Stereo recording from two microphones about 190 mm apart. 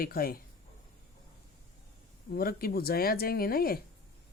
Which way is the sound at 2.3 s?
50° left (ahead or behind).